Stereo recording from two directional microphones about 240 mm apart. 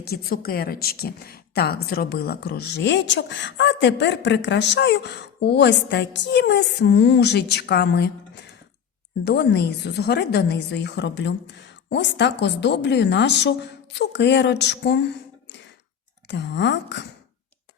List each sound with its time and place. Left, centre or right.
0.0 s a woman's voice: left
9.2 s a woman's voice: left